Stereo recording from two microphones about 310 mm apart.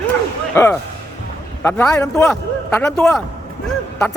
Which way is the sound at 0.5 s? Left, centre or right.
Centre.